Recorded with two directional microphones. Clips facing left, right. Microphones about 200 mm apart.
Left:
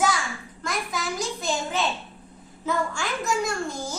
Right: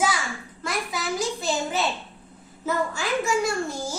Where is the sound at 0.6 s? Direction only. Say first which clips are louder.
Right 1 dB; 5° right (ahead or behind).